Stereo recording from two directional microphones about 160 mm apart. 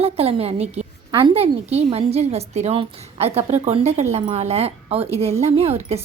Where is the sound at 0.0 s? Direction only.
40° right (ahead or behind).